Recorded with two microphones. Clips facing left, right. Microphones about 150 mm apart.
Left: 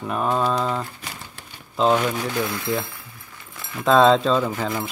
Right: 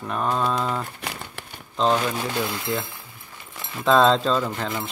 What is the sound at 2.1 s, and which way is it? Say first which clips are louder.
Speech: left 1 dB; 25° right (ahead or behind).